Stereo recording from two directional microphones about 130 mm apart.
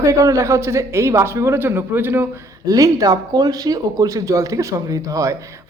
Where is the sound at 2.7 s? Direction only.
30° right (ahead or behind).